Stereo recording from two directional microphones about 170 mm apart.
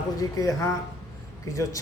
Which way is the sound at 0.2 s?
20° left (ahead or behind).